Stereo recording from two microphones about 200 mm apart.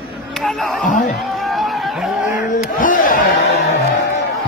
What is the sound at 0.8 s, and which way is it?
Speech, 40° left (ahead or behind).